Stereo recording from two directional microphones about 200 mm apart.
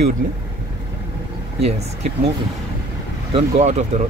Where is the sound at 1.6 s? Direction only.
30° right (ahead or behind).